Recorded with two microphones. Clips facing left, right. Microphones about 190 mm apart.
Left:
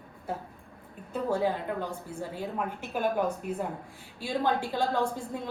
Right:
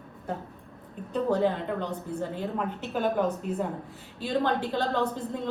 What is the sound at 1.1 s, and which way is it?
A woman's voice, 5° left (ahead or behind).